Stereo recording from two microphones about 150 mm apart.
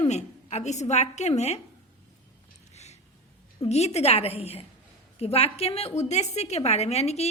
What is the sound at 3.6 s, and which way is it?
A woman's voice, 45° left (ahead or behind).